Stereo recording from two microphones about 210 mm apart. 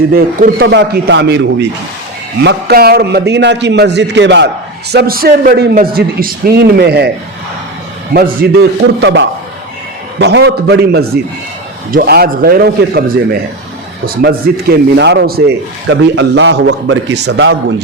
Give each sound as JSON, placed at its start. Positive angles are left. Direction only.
{"t": 0.1, "sound": "a man's voice", "side_deg": -45}
{"t": 8.1, "sound": "a man's voice", "side_deg": -45}
{"t": 14.2, "sound": "a man's voice", "side_deg": -50}